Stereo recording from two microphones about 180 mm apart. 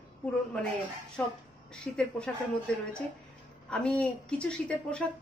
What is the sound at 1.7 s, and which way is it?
Speech, 5° left (ahead or behind).